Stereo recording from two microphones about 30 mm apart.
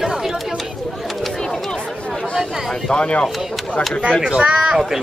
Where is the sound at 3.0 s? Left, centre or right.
Left.